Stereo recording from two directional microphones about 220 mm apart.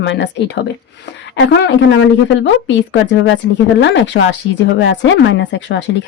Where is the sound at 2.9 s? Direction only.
60° left (ahead or behind).